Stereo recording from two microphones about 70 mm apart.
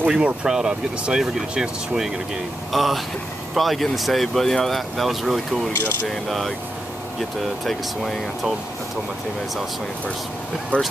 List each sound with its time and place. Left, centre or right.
0.0 s speech: centre
10.7 s speech: centre